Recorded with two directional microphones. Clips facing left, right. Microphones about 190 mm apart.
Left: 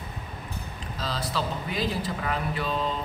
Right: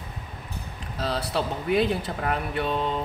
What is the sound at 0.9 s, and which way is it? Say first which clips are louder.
Speech: right 4 dB; 60° right (ahead or behind).